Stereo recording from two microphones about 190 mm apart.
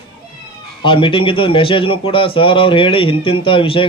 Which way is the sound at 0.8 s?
25° left (ahead or behind).